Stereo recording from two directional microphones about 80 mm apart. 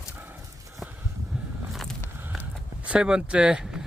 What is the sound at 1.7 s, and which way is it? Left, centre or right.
Vehicle, centre.